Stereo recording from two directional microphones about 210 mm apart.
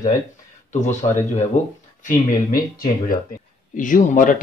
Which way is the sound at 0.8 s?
35° left (ahead or behind).